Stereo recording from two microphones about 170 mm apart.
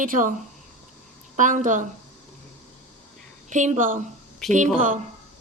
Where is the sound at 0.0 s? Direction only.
50° right (ahead or behind).